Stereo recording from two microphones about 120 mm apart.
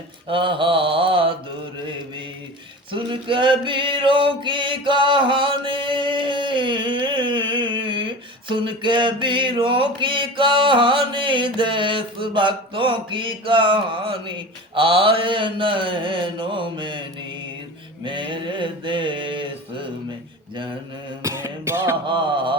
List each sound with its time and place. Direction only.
0.3 s mantra: 45° right (ahead or behind)
2.9 s a sound: 45° right (ahead or behind)
18.0 s mantra: 40° right (ahead or behind)
21.2 s beatboxing: 25° right (ahead or behind)
22.0 s carnatic music: 45° right (ahead or behind)